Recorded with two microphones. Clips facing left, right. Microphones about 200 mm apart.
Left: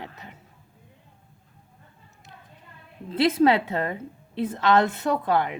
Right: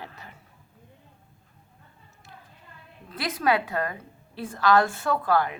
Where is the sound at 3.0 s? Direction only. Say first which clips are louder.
Left 6 dB; 25° left (ahead or behind).